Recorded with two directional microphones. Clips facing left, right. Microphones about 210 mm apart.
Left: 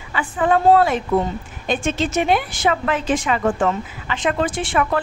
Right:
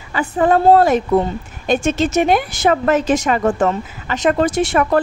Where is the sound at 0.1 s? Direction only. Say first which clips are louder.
Right 4 dB; 40° right (ahead or behind).